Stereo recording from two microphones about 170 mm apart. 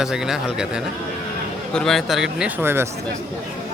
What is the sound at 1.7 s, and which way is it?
A man's voice, centre (ahead or behind).